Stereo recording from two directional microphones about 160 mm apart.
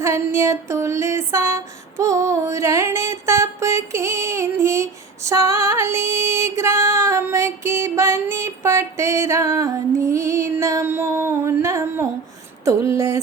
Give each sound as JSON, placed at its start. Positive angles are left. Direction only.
{"t": 0.0, "sound": "female singing", "side_deg": -15}